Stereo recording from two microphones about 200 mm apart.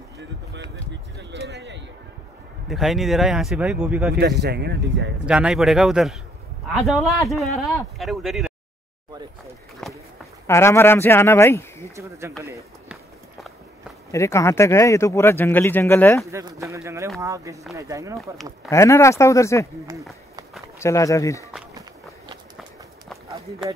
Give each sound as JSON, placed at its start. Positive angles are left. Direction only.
{"t": 1.3, "sound": "a sound", "side_deg": -60}
{"t": 2.7, "sound": "speech", "side_deg": 0}
{"t": 4.1, "sound": "speech", "side_deg": -55}
{"t": 5.2, "sound": "speech", "side_deg": -5}
{"t": 9.8, "sound": "walk", "side_deg": 0}
{"t": 10.4, "sound": "speech", "side_deg": 15}
{"t": 11.9, "sound": "speech", "side_deg": -15}
{"t": 12.4, "sound": "run", "side_deg": -15}
{"t": 14.1, "sound": "speech", "side_deg": 15}
{"t": 16.3, "sound": "speech", "side_deg": -15}
{"t": 18.7, "sound": "speech", "side_deg": 15}
{"t": 20.8, "sound": "speech", "side_deg": 15}